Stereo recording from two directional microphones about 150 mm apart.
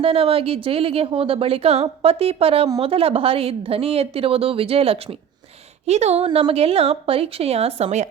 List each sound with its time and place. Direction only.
0.0 s a woman's voice: 40° right (ahead or behind)